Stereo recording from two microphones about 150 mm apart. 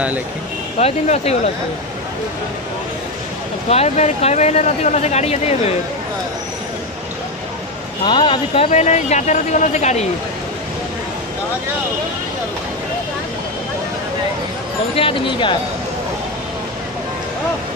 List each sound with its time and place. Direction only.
0.7 s speech: 50° left (ahead or behind)
3.6 s speech: 45° left (ahead or behind)
8.0 s speech: 30° left (ahead or behind)
8.6 s speech: 50° left (ahead or behind)
15.0 s speech: 35° left (ahead or behind)